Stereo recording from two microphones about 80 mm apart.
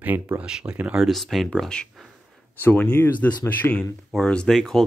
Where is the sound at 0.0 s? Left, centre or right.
Centre.